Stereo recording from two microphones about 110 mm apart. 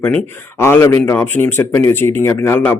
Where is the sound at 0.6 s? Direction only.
25° left (ahead or behind).